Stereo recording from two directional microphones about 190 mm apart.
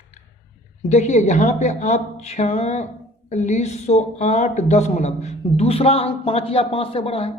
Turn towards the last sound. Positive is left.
turn(degrees=30)  # may be behind; listen again after turning